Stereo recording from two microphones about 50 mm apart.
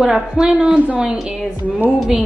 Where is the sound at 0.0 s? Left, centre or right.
Centre.